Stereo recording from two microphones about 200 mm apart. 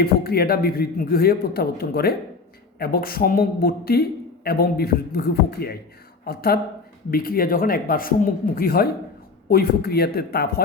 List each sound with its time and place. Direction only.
0.0 s speech: 50° left (ahead or behind)